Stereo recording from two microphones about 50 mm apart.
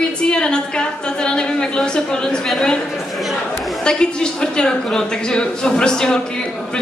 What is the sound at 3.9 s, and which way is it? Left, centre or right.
A woman's voice, centre.